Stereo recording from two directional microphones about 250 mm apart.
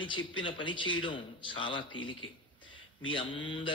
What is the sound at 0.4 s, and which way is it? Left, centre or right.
A man's voice, centre.